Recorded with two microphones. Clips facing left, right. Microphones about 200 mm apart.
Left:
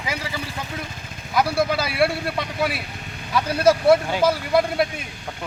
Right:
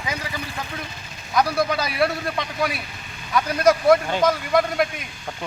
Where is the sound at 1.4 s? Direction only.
5° left (ahead or behind).